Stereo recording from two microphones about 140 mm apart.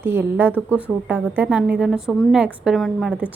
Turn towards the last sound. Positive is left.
turn(degrees=-5)  # may be behind; listen again after turning